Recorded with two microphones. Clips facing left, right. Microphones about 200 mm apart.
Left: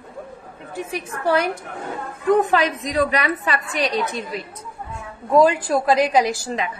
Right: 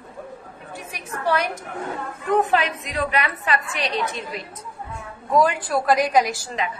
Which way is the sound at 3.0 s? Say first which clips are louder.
Left 4 dB; 40° left (ahead or behind).